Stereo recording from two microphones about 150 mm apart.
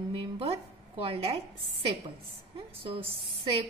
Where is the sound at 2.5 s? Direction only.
40° right (ahead or behind).